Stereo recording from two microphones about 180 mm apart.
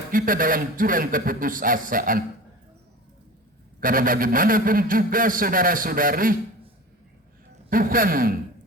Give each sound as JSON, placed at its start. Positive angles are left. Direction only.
{"t": 0.1, "sound": "a man's voice", "side_deg": -50}
{"t": 3.8, "sound": "a man's voice", "side_deg": -50}
{"t": 7.7, "sound": "a man's voice", "side_deg": -50}